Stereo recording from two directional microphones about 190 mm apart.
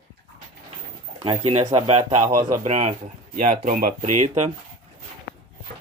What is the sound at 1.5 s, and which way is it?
Speech, 35° right (ahead or behind).